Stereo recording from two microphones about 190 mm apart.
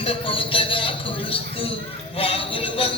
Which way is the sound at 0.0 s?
30° left (ahead or behind).